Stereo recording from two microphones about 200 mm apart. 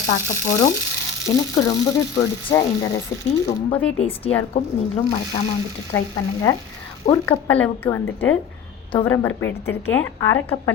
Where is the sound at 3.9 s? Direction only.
30° left (ahead or behind).